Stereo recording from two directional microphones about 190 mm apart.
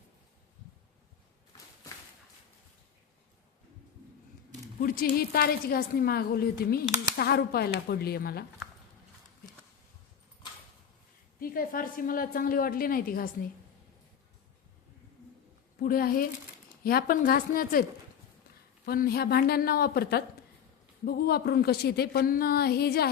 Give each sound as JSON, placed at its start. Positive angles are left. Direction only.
{"t": 4.8, "sound": "a woman's voice", "side_deg": 50}
{"t": 11.3, "sound": "a woman's voice", "side_deg": 50}
{"t": 15.8, "sound": "a woman's voice", "side_deg": 50}
{"t": 18.9, "sound": "a woman's voice", "side_deg": 55}